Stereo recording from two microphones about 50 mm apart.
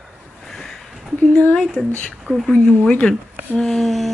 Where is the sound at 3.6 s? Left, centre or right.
Centre.